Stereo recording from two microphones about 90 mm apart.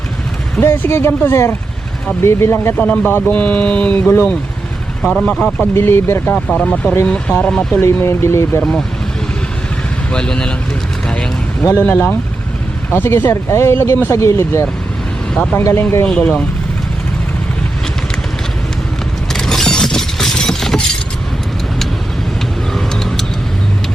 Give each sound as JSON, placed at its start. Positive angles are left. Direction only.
{"t": 0.6, "sound": "speech", "side_deg": 30}
{"t": 2.7, "sound": "speech", "side_deg": 15}
{"t": 5.0, "sound": "speech", "side_deg": 5}
{"t": 5.7, "sound": "speech", "side_deg": 25}
{"t": 6.3, "sound": "speech", "side_deg": 10}
{"t": 7.8, "sound": "speech", "side_deg": 30}
{"t": 10.1, "sound": "speech", "side_deg": 10}
{"t": 11.8, "sound": "speech", "side_deg": 15}
{"t": 19.3, "sound": "a sound", "side_deg": 5}
{"t": 22.7, "sound": "vehicle", "side_deg": 5}